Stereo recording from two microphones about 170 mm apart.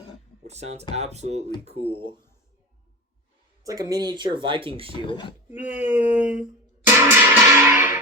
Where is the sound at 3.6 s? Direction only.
20° right (ahead or behind).